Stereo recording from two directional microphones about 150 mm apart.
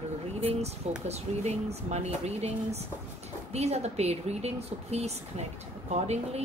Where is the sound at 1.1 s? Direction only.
45° right (ahead or behind).